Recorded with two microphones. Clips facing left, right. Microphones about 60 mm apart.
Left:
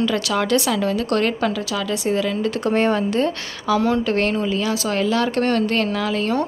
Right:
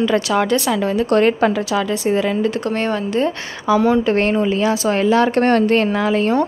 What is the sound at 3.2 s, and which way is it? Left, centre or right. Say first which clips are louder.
A woman's voice: right 3 dB; centre.